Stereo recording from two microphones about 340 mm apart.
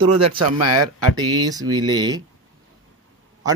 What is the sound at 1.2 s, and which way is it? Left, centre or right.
Speech, centre.